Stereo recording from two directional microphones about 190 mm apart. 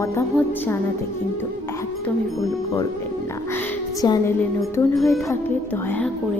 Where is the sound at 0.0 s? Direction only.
15° left (ahead or behind).